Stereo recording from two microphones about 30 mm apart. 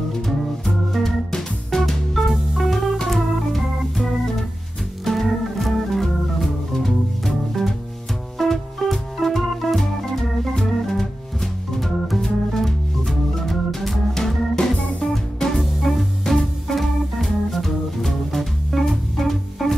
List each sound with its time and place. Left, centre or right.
0.9 s music: centre
1.9 s music: centre
3.1 s organ: centre
12.2 s music: centre
14.1 s organ: centre
14.6 s music: left
15.6 s music: centre
16.6 s organ: centre
18.9 s music: centre